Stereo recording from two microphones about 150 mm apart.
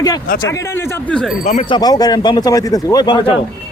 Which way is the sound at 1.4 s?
50° left (ahead or behind).